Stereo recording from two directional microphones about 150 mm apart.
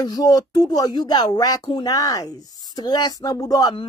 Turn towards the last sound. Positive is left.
turn(degrees=25)  # may be behind; listen again after turning